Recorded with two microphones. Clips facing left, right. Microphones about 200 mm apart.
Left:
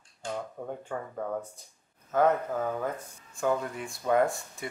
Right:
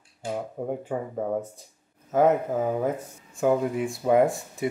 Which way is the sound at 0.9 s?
20° right (ahead or behind).